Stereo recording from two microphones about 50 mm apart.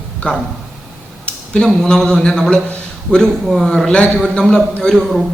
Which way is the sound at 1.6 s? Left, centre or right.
Centre.